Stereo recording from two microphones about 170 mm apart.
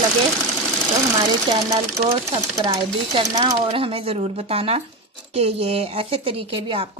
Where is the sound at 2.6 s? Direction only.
25° right (ahead or behind).